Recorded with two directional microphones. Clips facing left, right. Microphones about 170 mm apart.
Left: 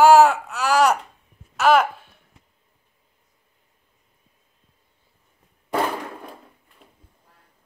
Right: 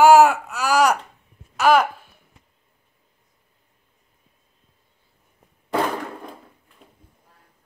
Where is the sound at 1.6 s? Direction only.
Centre (ahead or behind).